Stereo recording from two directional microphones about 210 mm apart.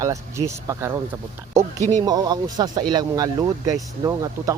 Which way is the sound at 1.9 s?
20° right (ahead or behind).